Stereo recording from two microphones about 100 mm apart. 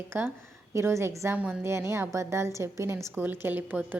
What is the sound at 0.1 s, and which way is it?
A woman's voice, 25° right (ahead or behind).